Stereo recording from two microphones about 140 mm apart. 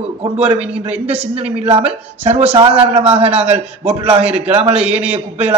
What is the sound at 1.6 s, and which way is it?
Speech, 45° right (ahead or behind).